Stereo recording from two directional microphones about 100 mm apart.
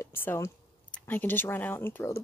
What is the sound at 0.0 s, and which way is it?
A woman's voice, 20° left (ahead or behind).